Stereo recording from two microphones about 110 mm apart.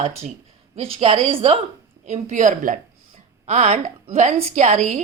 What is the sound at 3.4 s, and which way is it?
A woman's voice, 90° right.